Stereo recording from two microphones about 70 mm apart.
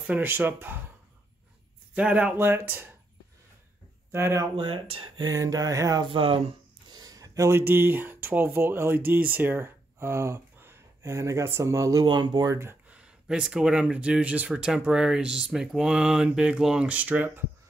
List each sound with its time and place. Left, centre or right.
0.2 s speech: right
2.0 s speech: centre
2.3 s speech: right
4.1 s speech: right
5.1 s a sound: right
6.9 s speech: right
12.0 s speech: right
12.9 s speech: centre
14.9 s speech: centre